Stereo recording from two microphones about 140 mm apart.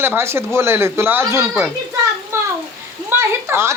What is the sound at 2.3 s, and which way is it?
Bathtub, 15° right (ahead or behind).